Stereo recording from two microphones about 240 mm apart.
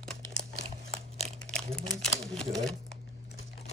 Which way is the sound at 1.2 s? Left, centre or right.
Right.